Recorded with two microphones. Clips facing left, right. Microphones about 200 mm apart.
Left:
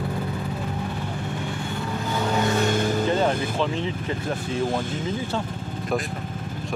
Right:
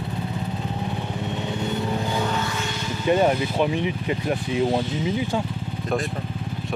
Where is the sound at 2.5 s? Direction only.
50° left (ahead or behind).